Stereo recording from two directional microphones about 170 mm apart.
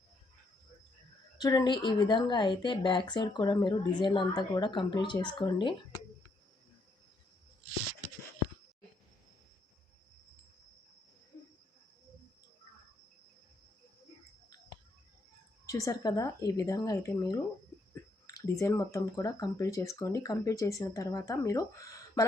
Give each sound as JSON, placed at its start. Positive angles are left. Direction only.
{"t": 1.4, "sound": "a woman's voice", "side_deg": 25}
{"t": 15.6, "sound": "a woman's voice", "side_deg": 20}